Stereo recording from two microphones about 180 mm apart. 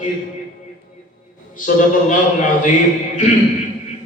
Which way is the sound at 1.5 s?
45° left (ahead or behind).